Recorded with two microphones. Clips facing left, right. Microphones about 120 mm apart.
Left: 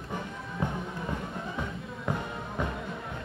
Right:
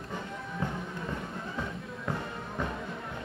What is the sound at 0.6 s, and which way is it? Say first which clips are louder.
Music: left 3 dB; 20° left (ahead or behind).